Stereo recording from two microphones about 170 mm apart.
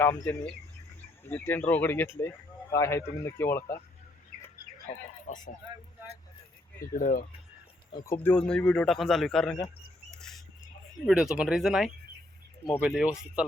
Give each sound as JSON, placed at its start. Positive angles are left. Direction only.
{"t": 0.0, "sound": "speech", "side_deg": 15}
{"t": 5.2, "sound": "a sound", "side_deg": 50}
{"t": 6.7, "sound": "speech", "side_deg": 55}
{"t": 8.1, "sound": "a man's voice", "side_deg": 10}
{"t": 10.1, "sound": "rodents", "side_deg": 5}
{"t": 11.0, "sound": "a man's voice", "side_deg": -5}